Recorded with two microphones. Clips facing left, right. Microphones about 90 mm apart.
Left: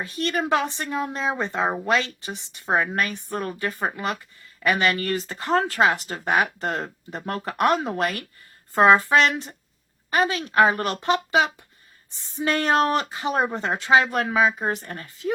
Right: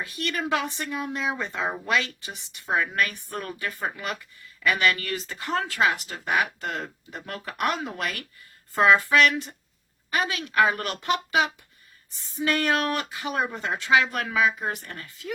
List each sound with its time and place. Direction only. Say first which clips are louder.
0.0 s a woman's voice: left 4 dB; 30° left (ahead or behind)
13.7 s a woman's voice: left 2 dB; 25° left (ahead or behind)